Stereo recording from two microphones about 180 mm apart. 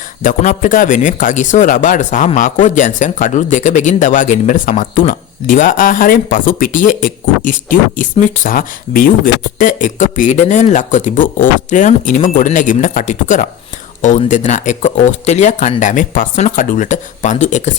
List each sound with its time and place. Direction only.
0.2 s speech: 50° left (ahead or behind)